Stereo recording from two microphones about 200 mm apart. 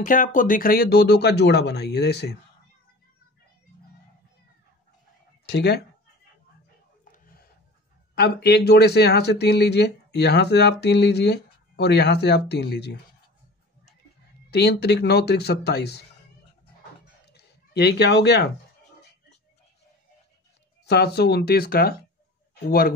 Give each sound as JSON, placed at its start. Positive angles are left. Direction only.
{"t": 0.0, "sound": "speech", "side_deg": 40}
{"t": 5.5, "sound": "speech", "side_deg": 55}
{"t": 7.1, "sound": "a sound", "side_deg": 45}
{"t": 8.1, "sound": "speech", "side_deg": 55}
{"t": 14.5, "sound": "speech", "side_deg": 55}
{"t": 17.3, "sound": "a sound", "side_deg": 55}
{"t": 20.8, "sound": "speech", "side_deg": 55}